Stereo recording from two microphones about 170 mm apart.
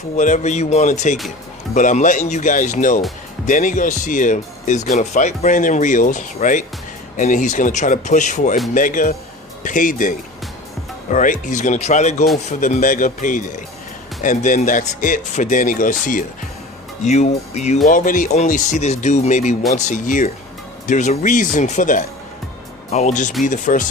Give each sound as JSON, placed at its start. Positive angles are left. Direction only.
{"t": 0.2, "sound": "speech", "side_deg": 45}
{"t": 17.1, "sound": "speech", "side_deg": 40}
{"t": 17.8, "sound": "speech", "side_deg": 50}